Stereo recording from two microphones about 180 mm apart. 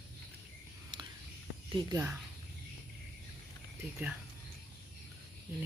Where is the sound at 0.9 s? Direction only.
25° right (ahead or behind).